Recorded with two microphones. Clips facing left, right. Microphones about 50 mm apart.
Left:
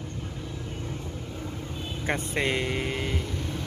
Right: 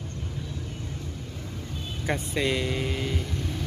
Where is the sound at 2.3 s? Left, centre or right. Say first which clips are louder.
Right 1 dB; left.